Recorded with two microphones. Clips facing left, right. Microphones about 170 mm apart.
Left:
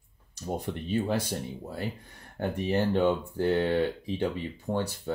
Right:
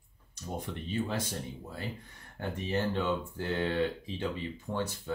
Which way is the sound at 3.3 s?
35° left (ahead or behind).